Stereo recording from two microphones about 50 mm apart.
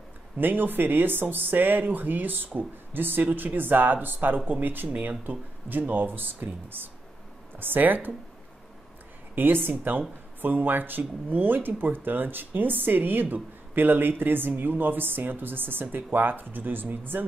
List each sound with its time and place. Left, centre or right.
0.4 s speech: right
9.3 s speech: right